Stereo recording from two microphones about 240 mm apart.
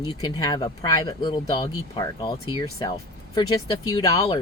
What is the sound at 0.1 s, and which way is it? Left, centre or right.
Speech, centre.